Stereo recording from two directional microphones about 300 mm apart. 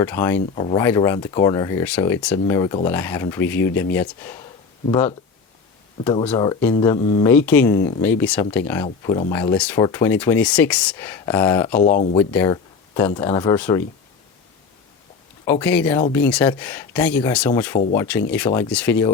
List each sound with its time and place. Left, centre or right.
0.0 s speech: centre
6.2 s speech: centre
11.8 s speech: left
12.1 s speech: centre
15.4 s speech: centre